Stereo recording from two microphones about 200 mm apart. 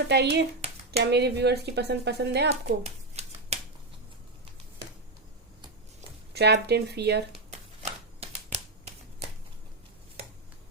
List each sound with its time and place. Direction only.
0.1 s speech: 55° right (ahead or behind)
2.5 s a sound: 30° right (ahead or behind)
6.3 s speech: 55° right (ahead or behind)
7.8 s shuffling cards: 35° right (ahead or behind)